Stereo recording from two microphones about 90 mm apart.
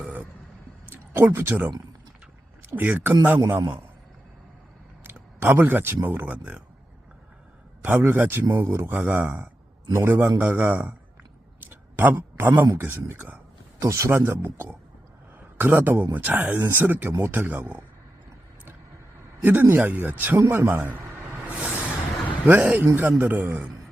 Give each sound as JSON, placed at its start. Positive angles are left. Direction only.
{"t": 0.9, "sound": "speech", "side_deg": -25}
{"t": 5.0, "sound": "speech", "side_deg": -25}
{"t": 7.9, "sound": "speech", "side_deg": -25}
{"t": 11.6, "sound": "a sound", "side_deg": -25}
{"t": 12.6, "sound": "speech", "side_deg": -25}
{"t": 13.7, "sound": "speech", "side_deg": -35}
{"t": 19.4, "sound": "a man's voice", "side_deg": -20}
{"t": 20.4, "sound": "a sound", "side_deg": -30}
{"t": 22.4, "sound": "speech", "side_deg": -20}